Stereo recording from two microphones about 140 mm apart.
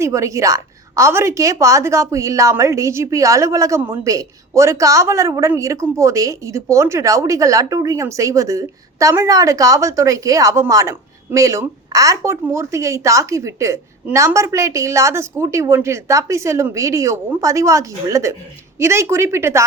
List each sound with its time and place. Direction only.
0.0 s a woman's voice: 20° right (ahead or behind)